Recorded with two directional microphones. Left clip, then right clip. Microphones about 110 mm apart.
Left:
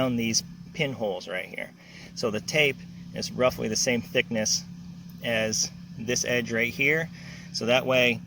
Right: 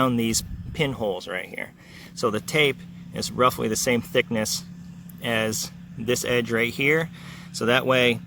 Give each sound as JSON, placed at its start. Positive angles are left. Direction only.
{"t": 0.0, "sound": "speech", "side_deg": -55}
{"t": 1.3, "sound": "speech", "side_deg": -45}